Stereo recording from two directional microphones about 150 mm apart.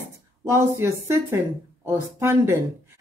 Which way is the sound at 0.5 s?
20° right (ahead or behind).